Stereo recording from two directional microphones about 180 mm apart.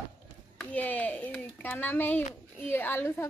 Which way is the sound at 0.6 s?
10° left (ahead or behind).